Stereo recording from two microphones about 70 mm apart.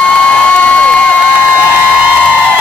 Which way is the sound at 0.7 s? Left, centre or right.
Centre.